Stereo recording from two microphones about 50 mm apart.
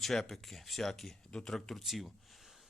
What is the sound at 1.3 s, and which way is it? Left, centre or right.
Speech, centre.